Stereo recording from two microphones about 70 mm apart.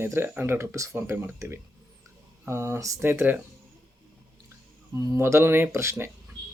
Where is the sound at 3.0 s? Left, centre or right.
Right.